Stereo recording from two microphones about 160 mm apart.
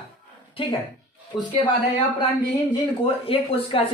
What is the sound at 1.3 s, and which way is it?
Speech, centre (ahead or behind).